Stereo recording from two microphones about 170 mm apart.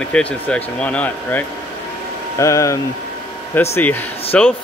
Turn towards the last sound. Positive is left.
turn(degrees=5)  # may be behind; listen again after turning